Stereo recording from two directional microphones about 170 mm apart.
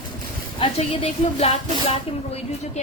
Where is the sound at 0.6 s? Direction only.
35° left (ahead or behind).